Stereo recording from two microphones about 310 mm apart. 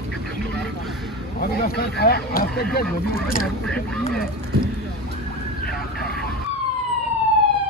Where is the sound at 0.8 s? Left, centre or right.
Centre.